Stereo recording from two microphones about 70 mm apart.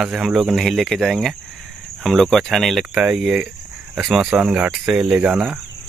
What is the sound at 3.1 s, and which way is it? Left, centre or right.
Speech, centre.